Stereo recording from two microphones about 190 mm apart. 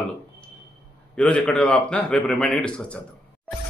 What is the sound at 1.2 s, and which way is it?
A man's voice, 5° left (ahead or behind).